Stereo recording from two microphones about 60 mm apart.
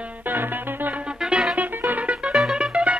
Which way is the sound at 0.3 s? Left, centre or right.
Right.